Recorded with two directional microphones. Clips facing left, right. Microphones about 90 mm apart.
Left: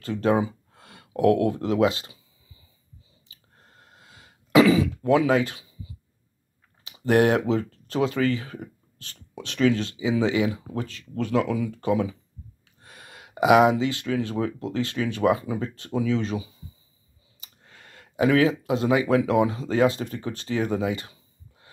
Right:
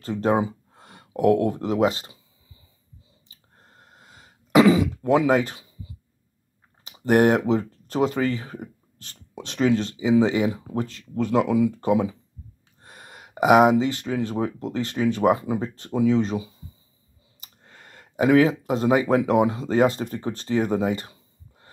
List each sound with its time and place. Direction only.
0.2 s gasp: 30° right (ahead or behind)
1.2 s speech: 35° right (ahead or behind)
4.8 s a sound: 20° right (ahead or behind)
5.2 s speech: 30° right (ahead or behind)
7.1 s speech: 35° right (ahead or behind)
8.5 s a sound: 25° right (ahead or behind)
9.4 s speech: 25° right (ahead or behind)
12.8 s speech: 40° right (ahead or behind)
15.2 s speech: 40° right (ahead or behind)
15.6 s speech: 30° right (ahead or behind)
17.6 s a sound: 35° right (ahead or behind)
18.1 s speech: 35° right (ahead or behind)